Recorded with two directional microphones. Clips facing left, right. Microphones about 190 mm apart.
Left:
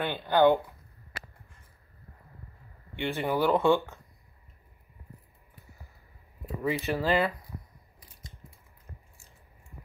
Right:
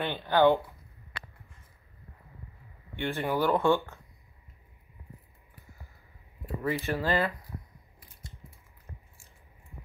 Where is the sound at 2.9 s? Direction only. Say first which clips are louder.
Left 1 dB; 15° left (ahead or behind).